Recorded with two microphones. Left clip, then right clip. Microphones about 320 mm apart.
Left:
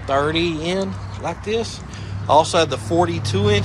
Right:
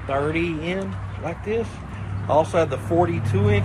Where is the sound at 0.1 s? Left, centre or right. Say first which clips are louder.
Left 4 dB; centre.